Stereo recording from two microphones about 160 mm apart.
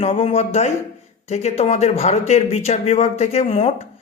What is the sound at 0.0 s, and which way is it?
A woman's voice, 35° left (ahead or behind).